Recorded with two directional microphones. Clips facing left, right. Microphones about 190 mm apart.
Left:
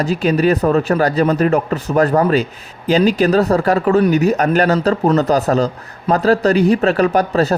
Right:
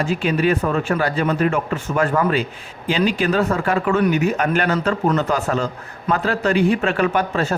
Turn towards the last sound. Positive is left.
turn(degrees=40)  # may be behind; listen again after turning